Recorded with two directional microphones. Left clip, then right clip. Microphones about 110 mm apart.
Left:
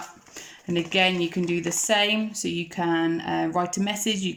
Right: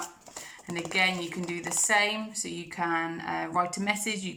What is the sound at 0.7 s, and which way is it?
Speech, 25° left (ahead or behind).